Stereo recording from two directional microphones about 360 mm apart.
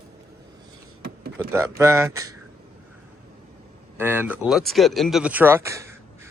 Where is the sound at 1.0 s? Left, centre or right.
Right.